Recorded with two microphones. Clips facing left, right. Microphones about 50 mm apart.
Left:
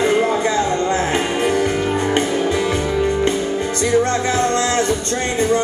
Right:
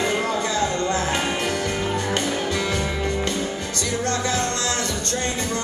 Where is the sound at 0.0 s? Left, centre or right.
Left.